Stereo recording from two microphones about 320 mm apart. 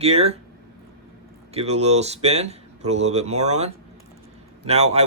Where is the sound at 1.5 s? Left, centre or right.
Centre.